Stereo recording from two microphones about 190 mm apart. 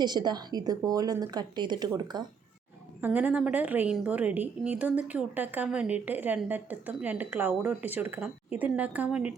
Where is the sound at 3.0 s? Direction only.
10° right (ahead or behind).